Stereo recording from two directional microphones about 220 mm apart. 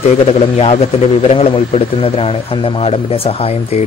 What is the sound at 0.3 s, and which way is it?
Speech, 25° left (ahead or behind).